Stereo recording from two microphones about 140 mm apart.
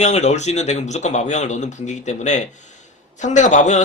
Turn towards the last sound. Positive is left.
turn(degrees=60)  # may be behind; listen again after turning